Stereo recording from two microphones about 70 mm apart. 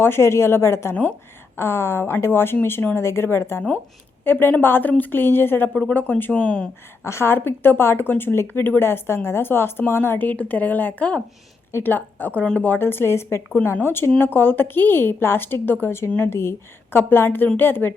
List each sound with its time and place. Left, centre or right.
0.0 s speech: left
7.0 s speech: left